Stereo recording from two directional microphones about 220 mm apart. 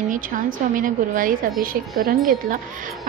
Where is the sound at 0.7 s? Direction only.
40° right (ahead or behind).